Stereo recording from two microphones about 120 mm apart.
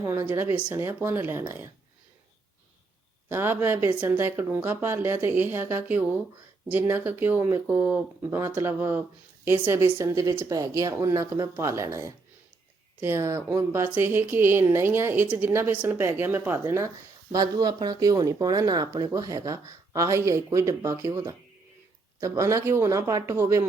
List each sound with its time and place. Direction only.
0.0 s speech: 20° right (ahead or behind)
3.2 s speech: 20° right (ahead or behind)